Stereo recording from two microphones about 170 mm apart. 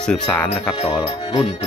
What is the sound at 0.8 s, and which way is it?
Speech, 30° left (ahead or behind).